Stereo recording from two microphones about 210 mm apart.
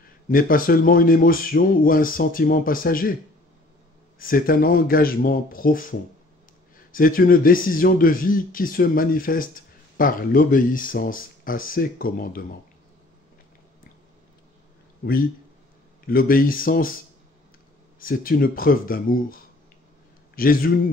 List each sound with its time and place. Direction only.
0.3 s speech: 40° left (ahead or behind)
4.2 s speech: 45° left (ahead or behind)
16.1 s speech: 45° left (ahead or behind)
17.9 s speech: 40° left (ahead or behind)